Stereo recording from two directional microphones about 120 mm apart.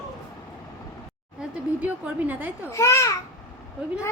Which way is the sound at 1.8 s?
15° right (ahead or behind).